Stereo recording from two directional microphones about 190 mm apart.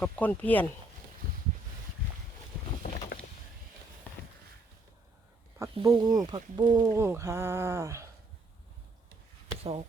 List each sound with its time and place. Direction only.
0.0 s speech: 10° left (ahead or behind)
2.8 s vehicle: 40° left (ahead or behind)
5.7 s speech: 20° right (ahead or behind)